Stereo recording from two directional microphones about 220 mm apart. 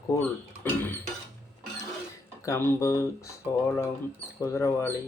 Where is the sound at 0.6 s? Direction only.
10° left (ahead or behind).